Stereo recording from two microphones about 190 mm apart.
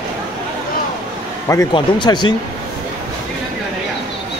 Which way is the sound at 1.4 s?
20° left (ahead or behind).